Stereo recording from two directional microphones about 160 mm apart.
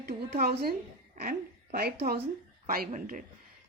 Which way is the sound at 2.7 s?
60° right (ahead or behind).